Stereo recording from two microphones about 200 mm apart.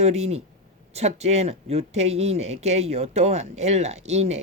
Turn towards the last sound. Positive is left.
turn(degrees=-35)  # may be behind; listen again after turning